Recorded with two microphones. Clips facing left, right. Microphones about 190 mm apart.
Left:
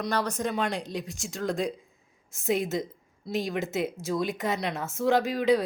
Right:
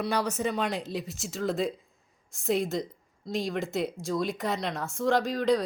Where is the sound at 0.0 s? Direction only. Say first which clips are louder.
Even; 10° right (ahead or behind).